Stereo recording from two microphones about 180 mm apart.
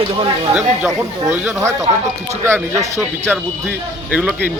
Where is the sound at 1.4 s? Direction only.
15° right (ahead or behind).